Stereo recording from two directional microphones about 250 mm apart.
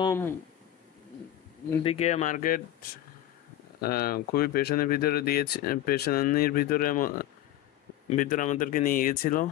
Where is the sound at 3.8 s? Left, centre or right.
Left.